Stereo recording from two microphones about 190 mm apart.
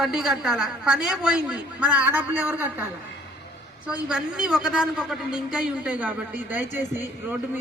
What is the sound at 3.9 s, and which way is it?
A man's voice, 5° right (ahead or behind).